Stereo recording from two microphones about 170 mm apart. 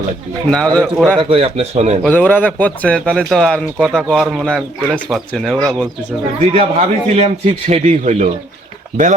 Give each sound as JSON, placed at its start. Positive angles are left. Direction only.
{"t": 0.5, "sound": "speech", "side_deg": 5}
{"t": 1.2, "sound": "a man's voice", "side_deg": -30}
{"t": 2.0, "sound": "speech", "side_deg": 10}
{"t": 6.5, "sound": "a man's voice", "side_deg": -40}